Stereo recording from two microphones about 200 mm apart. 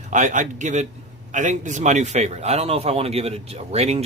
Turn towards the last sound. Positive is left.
turn(degrees=-30)  # may be behind; listen again after turning